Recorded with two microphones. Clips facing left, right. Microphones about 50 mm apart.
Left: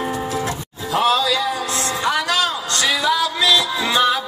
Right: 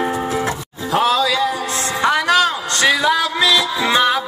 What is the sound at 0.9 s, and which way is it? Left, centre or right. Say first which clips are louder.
Speech: right 1 dB; right.